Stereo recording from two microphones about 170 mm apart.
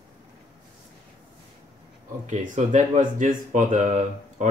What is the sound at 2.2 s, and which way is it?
Speech, 45° right (ahead or behind).